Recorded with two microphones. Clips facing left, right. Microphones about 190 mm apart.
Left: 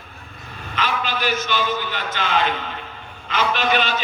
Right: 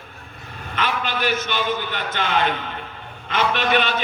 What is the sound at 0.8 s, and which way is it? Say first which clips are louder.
A man's voice: even; 55° right (ahead or behind).